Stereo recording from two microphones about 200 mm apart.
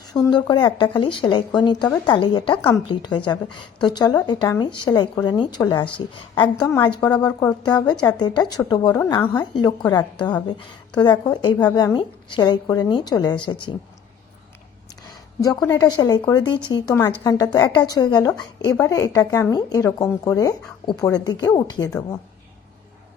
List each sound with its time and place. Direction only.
0.3 s a woman's voice: 20° left (ahead or behind)
15.4 s a woman's voice: 15° left (ahead or behind)